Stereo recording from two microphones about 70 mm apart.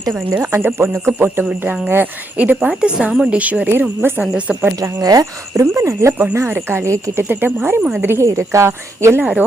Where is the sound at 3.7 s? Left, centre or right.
Right.